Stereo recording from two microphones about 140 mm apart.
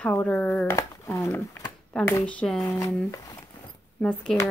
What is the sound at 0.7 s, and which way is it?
Speech, 20° left (ahead or behind).